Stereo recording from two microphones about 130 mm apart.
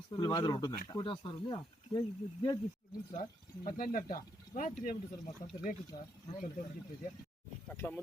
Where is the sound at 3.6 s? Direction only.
90° left.